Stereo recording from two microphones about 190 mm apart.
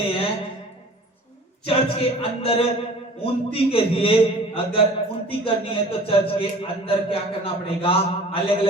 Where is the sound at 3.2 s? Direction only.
30° left (ahead or behind).